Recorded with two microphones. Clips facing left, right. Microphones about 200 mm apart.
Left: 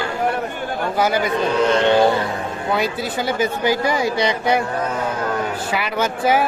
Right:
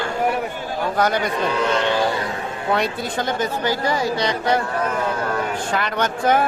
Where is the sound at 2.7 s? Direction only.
5° left (ahead or behind).